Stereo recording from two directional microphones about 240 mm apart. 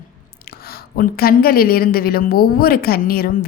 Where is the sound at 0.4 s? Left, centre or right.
Left.